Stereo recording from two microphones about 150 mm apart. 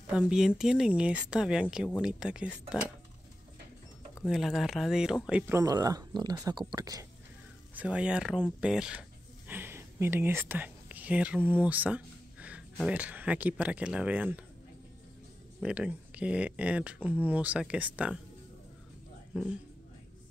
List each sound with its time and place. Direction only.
0.0 s speech: 10° right (ahead or behind)
4.3 s speech: centre (ahead or behind)
5.5 s speech: 20° right (ahead or behind)
7.7 s speech: 10° right (ahead or behind)
15.6 s speech: 10° right (ahead or behind)
19.3 s speech: 5° right (ahead or behind)